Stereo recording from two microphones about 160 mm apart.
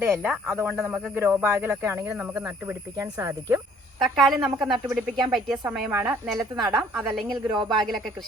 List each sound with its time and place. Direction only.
0.0 s speech: 15° right (ahead or behind)
4.0 s a woman's voice: centre (ahead or behind)